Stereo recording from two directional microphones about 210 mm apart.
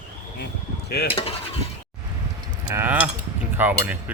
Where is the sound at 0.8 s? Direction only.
50° left (ahead or behind).